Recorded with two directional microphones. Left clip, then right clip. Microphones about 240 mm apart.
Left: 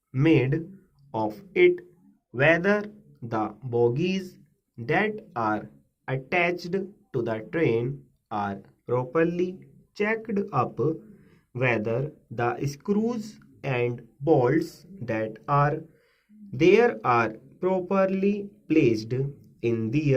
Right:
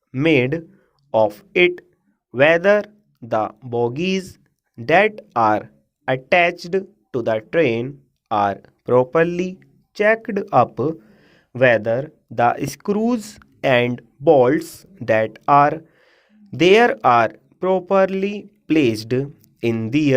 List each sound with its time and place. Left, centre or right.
0.1 s speech: right